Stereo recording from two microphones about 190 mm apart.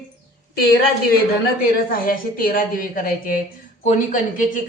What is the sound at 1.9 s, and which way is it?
Speech, 50° left (ahead or behind).